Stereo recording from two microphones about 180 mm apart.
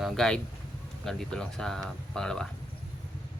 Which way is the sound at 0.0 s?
5° left (ahead or behind).